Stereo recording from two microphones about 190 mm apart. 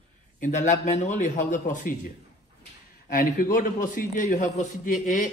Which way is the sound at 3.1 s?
45° left (ahead or behind).